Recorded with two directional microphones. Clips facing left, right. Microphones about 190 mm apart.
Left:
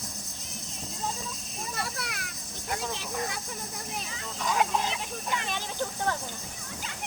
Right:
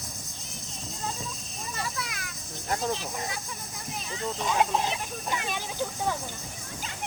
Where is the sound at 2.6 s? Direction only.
40° right (ahead or behind).